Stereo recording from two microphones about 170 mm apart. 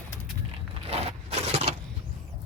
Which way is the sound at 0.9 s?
35° right (ahead or behind).